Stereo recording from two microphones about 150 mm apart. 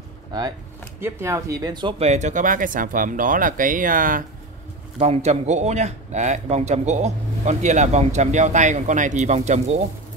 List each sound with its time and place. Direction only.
1.0 s speech: 20° right (ahead or behind)
2.0 s speech: 50° right (ahead or behind); by 4.2 s 65° right (ahead or behind)
4.9 s a man's voice: 50° right (ahead or behind)